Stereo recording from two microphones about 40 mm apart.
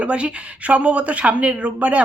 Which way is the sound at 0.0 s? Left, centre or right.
Right.